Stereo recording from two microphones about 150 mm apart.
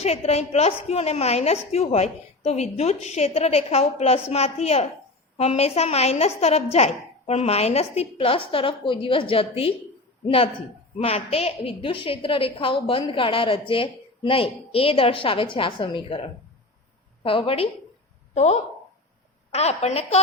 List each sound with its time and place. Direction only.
0.0 s a woman's voice: 45° left (ahead or behind)
17.2 s a woman's voice: 40° left (ahead or behind)
19.5 s a woman's voice: 45° left (ahead or behind)